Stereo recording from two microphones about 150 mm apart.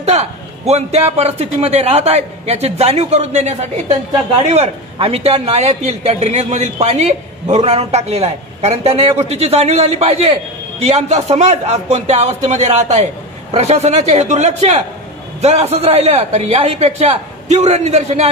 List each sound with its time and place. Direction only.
0.0 s speech: 45° right (ahead or behind)